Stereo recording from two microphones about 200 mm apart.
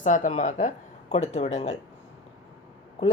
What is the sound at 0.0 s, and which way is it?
Speech, 40° left (ahead or behind).